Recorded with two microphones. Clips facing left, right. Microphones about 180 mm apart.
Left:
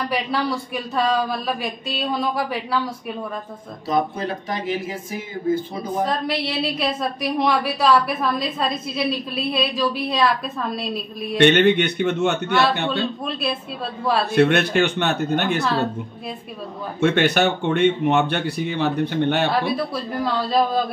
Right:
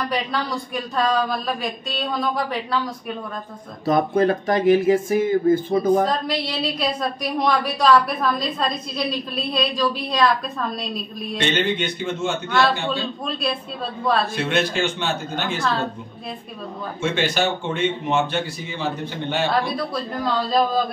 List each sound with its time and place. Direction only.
0.1 s a woman's voice: 5° left (ahead or behind)
3.8 s speech: 50° right (ahead or behind)
6.0 s a woman's voice: 5° left (ahead or behind)
11.3 s speech: 65° left (ahead or behind)
12.4 s a woman's voice: centre (ahead or behind)
14.3 s speech: 60° left (ahead or behind)
17.0 s speech: 60° left (ahead or behind)
19.7 s a woman's voice: 5° left (ahead or behind)